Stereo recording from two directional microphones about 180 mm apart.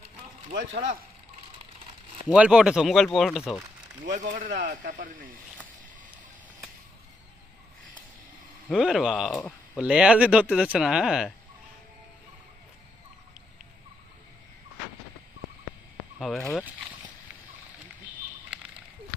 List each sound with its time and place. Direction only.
0.7 s speech: 40° right (ahead or behind)
2.3 s speech: 5° right (ahead or behind)
4.0 s speech: 45° right (ahead or behind)
8.7 s speech: centre (ahead or behind)
16.1 s speech: centre (ahead or behind)